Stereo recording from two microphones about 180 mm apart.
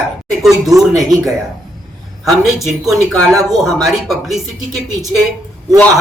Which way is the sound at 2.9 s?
20° right (ahead or behind).